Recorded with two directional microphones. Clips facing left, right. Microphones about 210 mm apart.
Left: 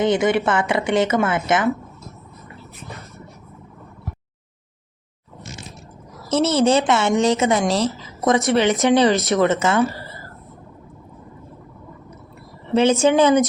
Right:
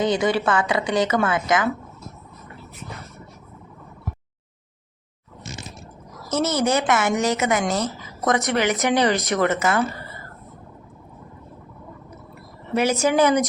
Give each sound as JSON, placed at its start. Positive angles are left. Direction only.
{"t": 0.0, "sound": "a woman's voice", "side_deg": 25}
{"t": 6.2, "sound": "a woman's voice", "side_deg": 25}
{"t": 12.7, "sound": "a woman's voice", "side_deg": 25}